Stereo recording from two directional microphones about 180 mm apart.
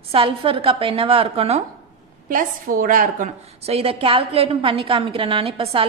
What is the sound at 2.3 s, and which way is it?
A woman's voice, 50° right (ahead or behind).